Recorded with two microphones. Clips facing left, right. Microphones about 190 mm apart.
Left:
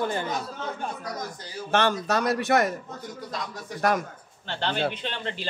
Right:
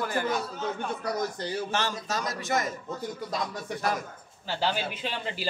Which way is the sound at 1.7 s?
60° left (ahead or behind).